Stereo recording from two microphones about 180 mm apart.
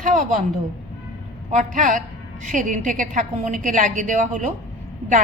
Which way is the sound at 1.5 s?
45° right (ahead or behind).